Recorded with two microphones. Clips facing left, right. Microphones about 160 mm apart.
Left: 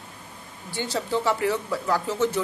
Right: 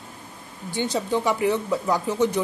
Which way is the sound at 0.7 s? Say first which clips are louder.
Right 2 dB; 20° right (ahead or behind).